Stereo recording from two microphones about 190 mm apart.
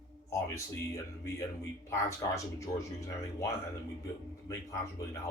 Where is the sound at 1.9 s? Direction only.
15° left (ahead or behind).